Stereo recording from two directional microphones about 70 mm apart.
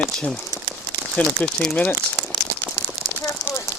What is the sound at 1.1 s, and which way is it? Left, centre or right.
Speech, centre.